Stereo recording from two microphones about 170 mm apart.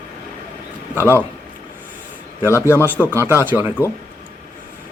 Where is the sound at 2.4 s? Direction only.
15° left (ahead or behind).